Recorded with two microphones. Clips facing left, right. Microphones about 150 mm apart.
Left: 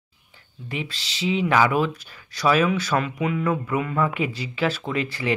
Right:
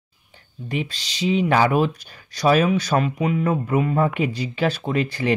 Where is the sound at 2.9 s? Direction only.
35° right (ahead or behind).